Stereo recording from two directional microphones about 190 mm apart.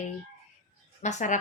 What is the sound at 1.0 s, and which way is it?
Speech, 40° left (ahead or behind).